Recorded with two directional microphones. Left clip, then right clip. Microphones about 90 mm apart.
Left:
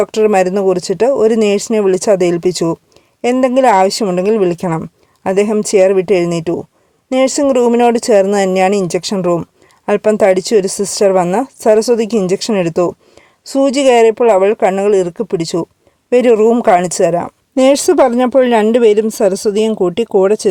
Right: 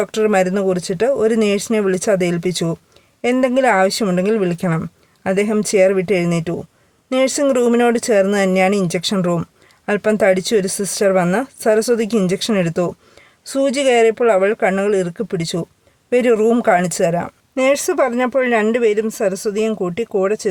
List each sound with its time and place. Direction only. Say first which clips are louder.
0.0 s speech: left 5 dB; 30° left (ahead or behind)
17.5 s speech: left 6 dB; 60° left (ahead or behind)